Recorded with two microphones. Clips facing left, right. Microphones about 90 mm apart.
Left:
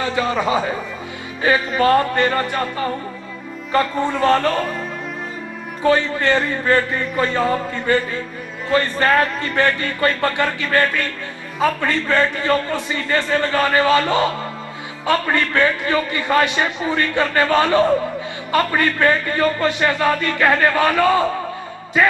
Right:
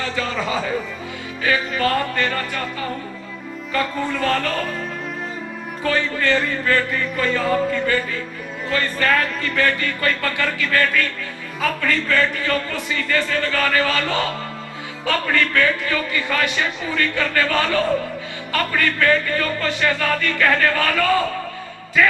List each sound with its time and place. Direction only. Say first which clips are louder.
0.0 s a man's voice: left 5 dB; 20° left (ahead or behind)
1.4 s music: left 4 dB; 30° left (ahead or behind)
5.9 s a man's voice: left 4 dB; 25° left (ahead or behind)
6.6 s music: left 2 dB; 30° left (ahead or behind)
8.7 s a man's voice: left 4 dB; 30° left (ahead or behind)